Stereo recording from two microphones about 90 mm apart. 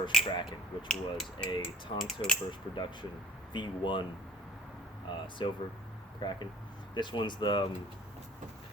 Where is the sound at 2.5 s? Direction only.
60° left (ahead or behind).